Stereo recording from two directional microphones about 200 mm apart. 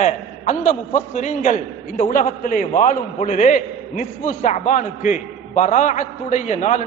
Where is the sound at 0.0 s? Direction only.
40° left (ahead or behind).